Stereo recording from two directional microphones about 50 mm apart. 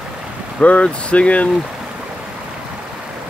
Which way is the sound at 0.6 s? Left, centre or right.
Left.